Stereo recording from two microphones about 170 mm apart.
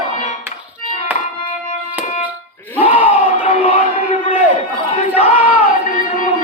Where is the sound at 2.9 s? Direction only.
10° right (ahead or behind).